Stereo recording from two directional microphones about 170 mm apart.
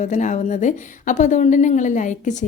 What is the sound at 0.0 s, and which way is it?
A woman's voice, 45° left (ahead or behind).